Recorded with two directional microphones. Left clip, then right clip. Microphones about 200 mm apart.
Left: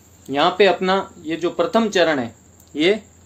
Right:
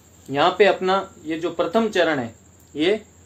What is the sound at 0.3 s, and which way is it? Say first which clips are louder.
Speech: left 1 dB; 45° left (ahead or behind).